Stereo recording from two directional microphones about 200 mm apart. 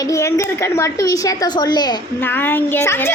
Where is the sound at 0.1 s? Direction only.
15° left (ahead or behind).